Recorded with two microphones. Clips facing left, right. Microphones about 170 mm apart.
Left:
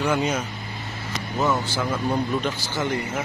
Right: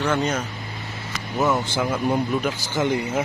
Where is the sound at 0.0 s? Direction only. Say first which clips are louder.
Even; 10° left (ahead or behind).